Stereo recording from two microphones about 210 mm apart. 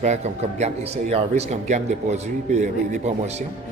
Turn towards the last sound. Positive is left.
turn(degrees=-35)  # may be behind; listen again after turning